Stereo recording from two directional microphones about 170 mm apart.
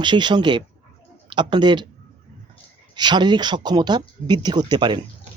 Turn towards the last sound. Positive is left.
turn(degrees=-25)  # may be behind; listen again after turning